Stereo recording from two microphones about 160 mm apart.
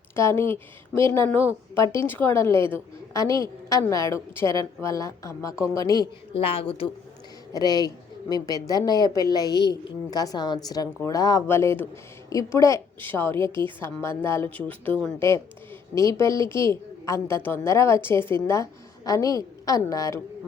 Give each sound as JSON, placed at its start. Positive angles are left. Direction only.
{"t": 0.2, "sound": "a woman's voice", "side_deg": 15}
{"t": 6.3, "sound": "speech", "side_deg": 35}
{"t": 7.5, "sound": "a woman's voice", "side_deg": 25}
{"t": 16.0, "sound": "a woman's voice", "side_deg": 20}